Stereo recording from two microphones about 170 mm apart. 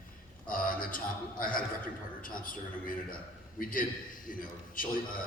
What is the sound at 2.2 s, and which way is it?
A man's voice, 55° left (ahead or behind).